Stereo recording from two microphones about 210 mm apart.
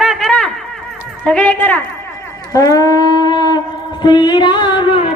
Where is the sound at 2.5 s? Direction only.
15° left (ahead or behind).